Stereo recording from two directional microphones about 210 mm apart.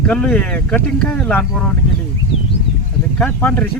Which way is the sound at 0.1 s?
5° left (ahead or behind).